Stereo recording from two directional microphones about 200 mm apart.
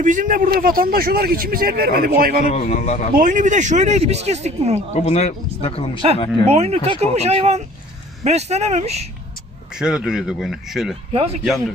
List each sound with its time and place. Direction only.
0.0 s speech: 40° right (ahead or behind)
2.5 s a man's voice: 35° left (ahead or behind)
3.2 s speech: 40° right (ahead or behind)
4.9 s speech: 35° left (ahead or behind)
6.4 s speech: 30° right (ahead or behind)
9.7 s speech: 5° right (ahead or behind)
11.1 s speech: 30° right (ahead or behind)